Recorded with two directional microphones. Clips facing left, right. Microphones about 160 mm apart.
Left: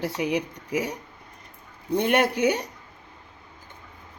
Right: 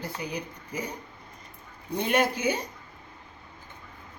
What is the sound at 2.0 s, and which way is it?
Speech, 65° left (ahead or behind).